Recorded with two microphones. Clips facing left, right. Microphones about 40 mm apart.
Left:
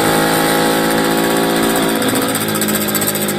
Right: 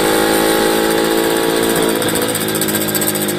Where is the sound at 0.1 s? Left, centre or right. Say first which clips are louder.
Even; left.